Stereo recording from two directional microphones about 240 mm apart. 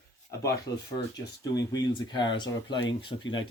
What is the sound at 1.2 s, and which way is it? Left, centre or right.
Speech, centre.